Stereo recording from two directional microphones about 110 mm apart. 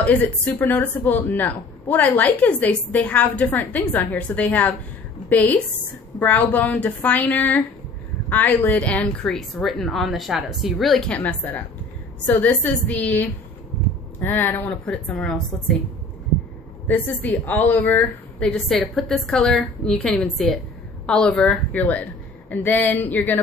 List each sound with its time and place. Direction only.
0.0 s a woman's voice: 15° left (ahead or behind)
16.8 s a woman's voice: 15° left (ahead or behind)